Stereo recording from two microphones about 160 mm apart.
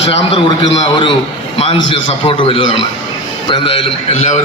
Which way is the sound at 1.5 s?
35° left (ahead or behind).